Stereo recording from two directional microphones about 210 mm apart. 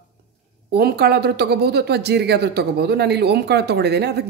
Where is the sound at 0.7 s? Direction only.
50° right (ahead or behind).